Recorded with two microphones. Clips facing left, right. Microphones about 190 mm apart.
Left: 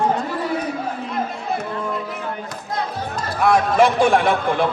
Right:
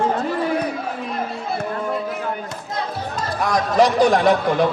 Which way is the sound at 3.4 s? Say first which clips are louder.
Left 2 dB; 40° right (ahead or behind).